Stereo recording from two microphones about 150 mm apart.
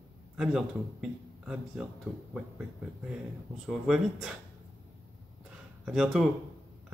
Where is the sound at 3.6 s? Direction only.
Centre (ahead or behind).